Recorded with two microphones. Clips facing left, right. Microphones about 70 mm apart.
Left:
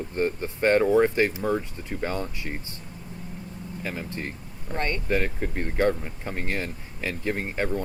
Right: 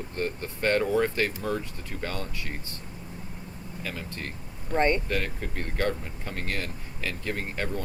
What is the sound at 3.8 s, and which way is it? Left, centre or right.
Speech, left.